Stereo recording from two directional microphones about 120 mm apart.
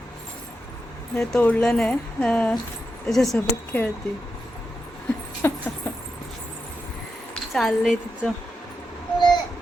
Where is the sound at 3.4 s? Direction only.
15° left (ahead or behind).